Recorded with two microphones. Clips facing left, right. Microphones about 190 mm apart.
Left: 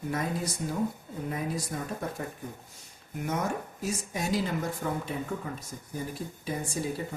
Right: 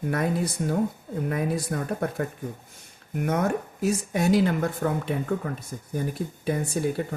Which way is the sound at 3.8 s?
65° right (ahead or behind).